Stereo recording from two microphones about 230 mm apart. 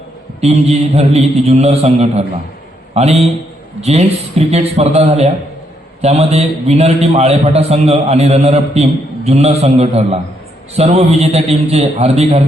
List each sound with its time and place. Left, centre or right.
0.4 s a man's voice: right